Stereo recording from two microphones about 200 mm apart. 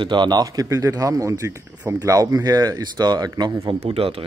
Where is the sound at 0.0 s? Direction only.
25° right (ahead or behind).